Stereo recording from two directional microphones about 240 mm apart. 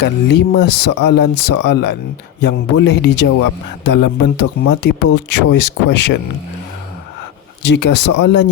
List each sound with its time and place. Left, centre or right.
0.0 s speech: left
4.4 s speech: left
7.6 s speech: left